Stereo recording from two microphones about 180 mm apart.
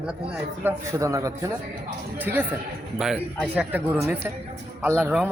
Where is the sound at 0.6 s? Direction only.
15° right (ahead or behind).